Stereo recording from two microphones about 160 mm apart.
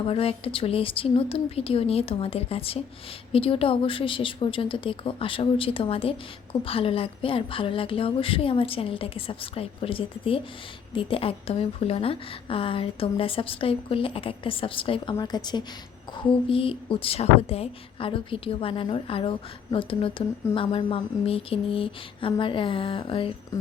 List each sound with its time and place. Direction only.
0.0 s a woman's voice: 35° left (ahead or behind)